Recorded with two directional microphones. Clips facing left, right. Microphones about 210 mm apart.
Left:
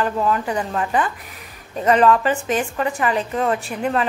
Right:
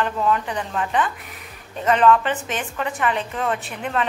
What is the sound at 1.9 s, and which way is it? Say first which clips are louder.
A woman's voice: left 1 dB; 40° left (ahead or behind).